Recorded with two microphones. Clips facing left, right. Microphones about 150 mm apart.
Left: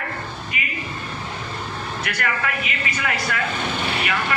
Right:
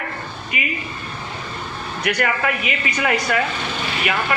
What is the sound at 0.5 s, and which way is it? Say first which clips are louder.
Speech: right 6 dB; 20° right (ahead or behind).